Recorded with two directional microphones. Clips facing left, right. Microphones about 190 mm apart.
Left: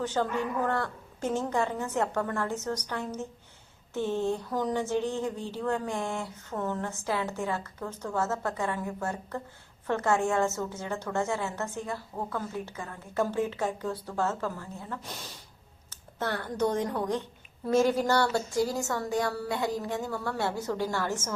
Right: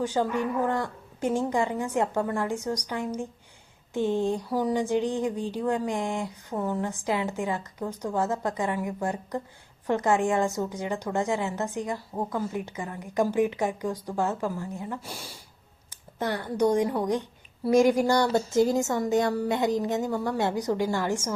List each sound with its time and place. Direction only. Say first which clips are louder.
0.0 s a woman's voice: right 3 dB; 10° right (ahead or behind)